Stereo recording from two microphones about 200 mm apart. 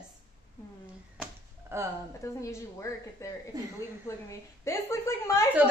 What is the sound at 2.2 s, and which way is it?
A woman's voice, 15° left (ahead or behind).